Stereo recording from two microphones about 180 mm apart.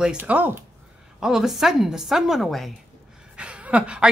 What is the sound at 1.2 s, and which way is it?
A woman's voice, 5° right (ahead or behind).